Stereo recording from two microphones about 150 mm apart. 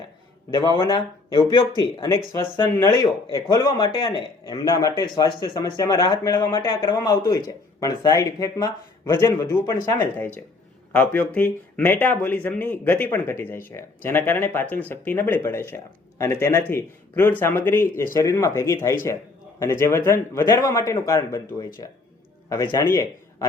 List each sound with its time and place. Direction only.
0.5 s a man's voice: 25° left (ahead or behind)
2.1 s a man's voice: 15° left (ahead or behind)
20.1 s a man's voice: 15° left (ahead or behind)